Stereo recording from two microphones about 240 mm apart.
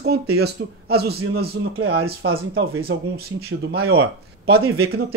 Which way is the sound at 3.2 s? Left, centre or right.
Right.